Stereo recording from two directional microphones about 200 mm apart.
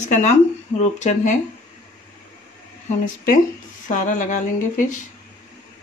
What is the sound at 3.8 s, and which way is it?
A woman's voice, 40° left (ahead or behind).